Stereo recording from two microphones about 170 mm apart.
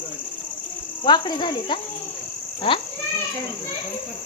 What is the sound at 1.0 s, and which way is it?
Speech, 25° left (ahead or behind).